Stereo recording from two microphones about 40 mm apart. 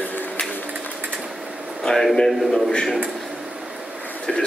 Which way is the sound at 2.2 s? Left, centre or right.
Centre.